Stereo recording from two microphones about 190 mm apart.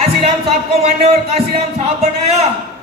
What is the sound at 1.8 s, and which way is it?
Speech, 30° right (ahead or behind).